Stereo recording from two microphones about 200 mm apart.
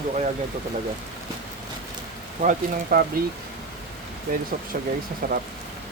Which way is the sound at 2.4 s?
45° right (ahead or behind).